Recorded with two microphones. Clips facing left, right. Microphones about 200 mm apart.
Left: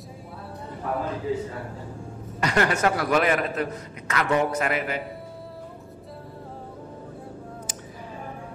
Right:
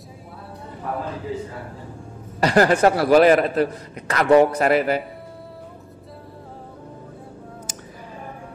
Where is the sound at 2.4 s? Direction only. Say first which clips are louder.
Right 7 dB; 35° right (ahead or behind).